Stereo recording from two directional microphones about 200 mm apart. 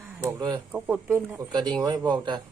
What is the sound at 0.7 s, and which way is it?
Speech, 10° right (ahead or behind).